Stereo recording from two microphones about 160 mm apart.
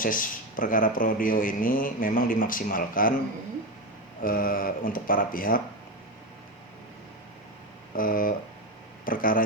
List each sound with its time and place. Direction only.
0.0 s speech: 60° left (ahead or behind)
4.2 s speech: 60° left (ahead or behind)
7.9 s speech: 60° left (ahead or behind)